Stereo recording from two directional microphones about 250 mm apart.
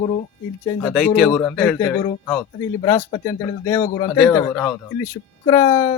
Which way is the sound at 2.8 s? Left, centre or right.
Centre.